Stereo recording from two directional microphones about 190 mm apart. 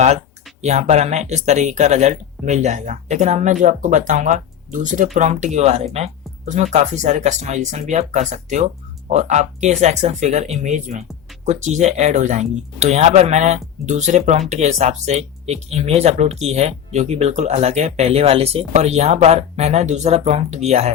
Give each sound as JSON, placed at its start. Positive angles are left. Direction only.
{"t": 0.6, "sound": "speech", "side_deg": -35}